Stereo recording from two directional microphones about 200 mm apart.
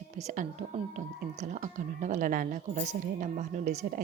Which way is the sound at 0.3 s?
35° right (ahead or behind).